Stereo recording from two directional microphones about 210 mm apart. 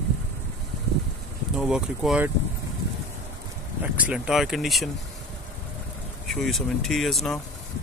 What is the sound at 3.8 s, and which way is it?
Speech, 5° right (ahead or behind).